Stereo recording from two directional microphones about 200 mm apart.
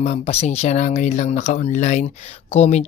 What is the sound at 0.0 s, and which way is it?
Speech, 35° left (ahead or behind).